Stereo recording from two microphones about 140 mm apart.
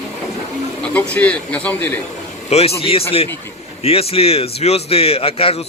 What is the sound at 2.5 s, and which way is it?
A man's voice, 45° left (ahead or behind).